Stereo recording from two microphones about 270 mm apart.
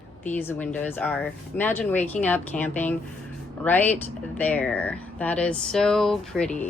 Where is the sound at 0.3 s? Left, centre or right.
Centre.